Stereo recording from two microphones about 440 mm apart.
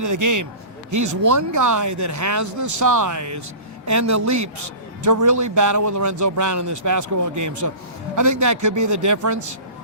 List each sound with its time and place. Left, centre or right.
0.0 s a man's voice: right